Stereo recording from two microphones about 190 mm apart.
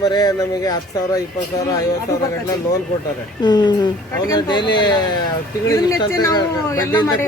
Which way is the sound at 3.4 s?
25° left (ahead or behind).